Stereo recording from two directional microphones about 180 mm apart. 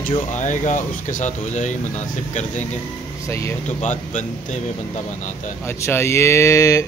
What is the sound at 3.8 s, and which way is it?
Speech, 45° left (ahead or behind).